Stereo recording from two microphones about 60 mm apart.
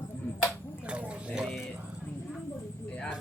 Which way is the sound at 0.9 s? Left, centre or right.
Centre.